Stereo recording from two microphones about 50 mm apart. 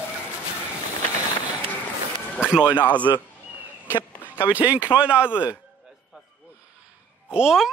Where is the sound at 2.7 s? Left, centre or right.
Left.